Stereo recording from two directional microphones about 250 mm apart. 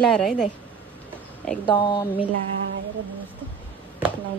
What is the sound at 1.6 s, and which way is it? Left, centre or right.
Speech, centre.